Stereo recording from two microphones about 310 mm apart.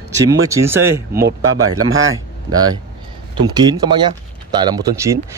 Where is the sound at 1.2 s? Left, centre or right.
Right.